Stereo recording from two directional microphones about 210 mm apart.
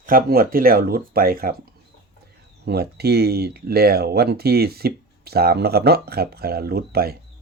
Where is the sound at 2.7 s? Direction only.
50° right (ahead or behind).